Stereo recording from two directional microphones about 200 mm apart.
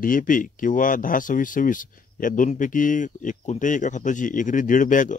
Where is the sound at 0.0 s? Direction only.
40° left (ahead or behind).